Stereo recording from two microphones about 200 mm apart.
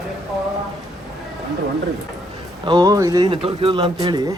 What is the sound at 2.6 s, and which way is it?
Speech, 20° right (ahead or behind).